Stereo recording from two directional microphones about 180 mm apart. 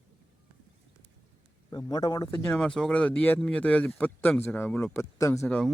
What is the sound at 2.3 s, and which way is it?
Speech, 10° left (ahead or behind).